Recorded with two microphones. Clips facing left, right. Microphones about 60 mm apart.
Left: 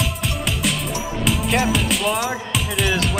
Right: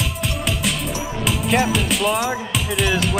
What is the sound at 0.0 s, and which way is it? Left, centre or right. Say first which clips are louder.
Music: even; centre.